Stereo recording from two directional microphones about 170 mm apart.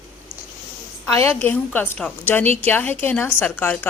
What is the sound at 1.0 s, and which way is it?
A woman's voice, 15° left (ahead or behind).